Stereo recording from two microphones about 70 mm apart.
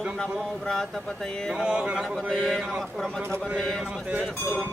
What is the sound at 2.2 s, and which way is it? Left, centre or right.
Speech, centre.